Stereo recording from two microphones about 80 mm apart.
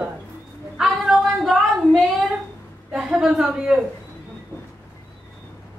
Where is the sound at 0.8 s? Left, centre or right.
Centre.